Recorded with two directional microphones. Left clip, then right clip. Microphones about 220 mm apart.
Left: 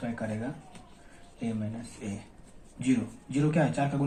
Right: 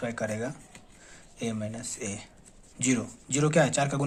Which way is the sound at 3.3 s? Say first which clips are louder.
Right 4 dB; 50° right (ahead or behind).